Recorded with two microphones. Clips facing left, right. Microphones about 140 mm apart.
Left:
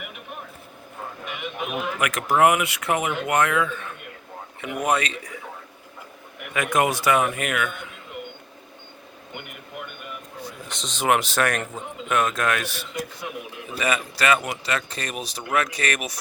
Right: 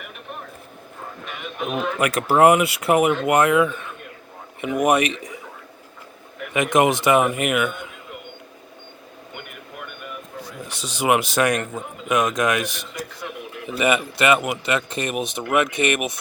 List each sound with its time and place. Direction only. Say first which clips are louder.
1.4 s a sound: right 4 dB; 5° left (ahead or behind)
2.0 s a man's voice: right 3 dB; 30° right (ahead or behind)
6.5 s a man's voice: right 4 dB; 20° right (ahead or behind)
10.7 s speech: right 2 dB; 10° right (ahead or behind)
12.9 s a man's voice: left 1 dB; 25° left (ahead or behind)
13.7 s a man's voice: right 5 dB; 25° right (ahead or behind)
14.3 s speech: right 4 dB; 10° right (ahead or behind)
15.2 s a man's voice: right 4 dB; 20° right (ahead or behind)